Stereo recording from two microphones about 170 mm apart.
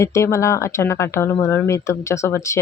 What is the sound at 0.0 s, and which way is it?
Speech, 15° left (ahead or behind).